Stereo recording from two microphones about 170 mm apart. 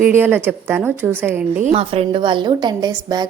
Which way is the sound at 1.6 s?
35° right (ahead or behind).